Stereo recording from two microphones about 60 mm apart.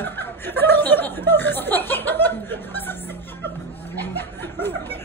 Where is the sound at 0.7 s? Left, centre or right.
Left.